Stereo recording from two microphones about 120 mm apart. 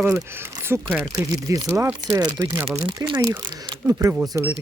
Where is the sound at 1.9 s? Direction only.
15° right (ahead or behind).